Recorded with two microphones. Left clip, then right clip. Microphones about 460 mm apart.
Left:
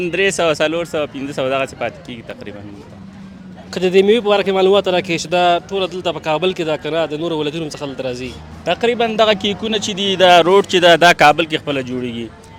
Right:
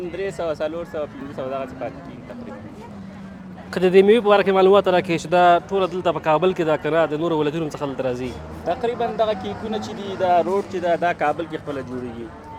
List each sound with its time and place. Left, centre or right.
0.1 s speech: left
3.7 s speech: centre
8.6 s speech: left